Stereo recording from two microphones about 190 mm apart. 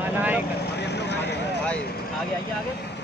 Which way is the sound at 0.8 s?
65° left (ahead or behind).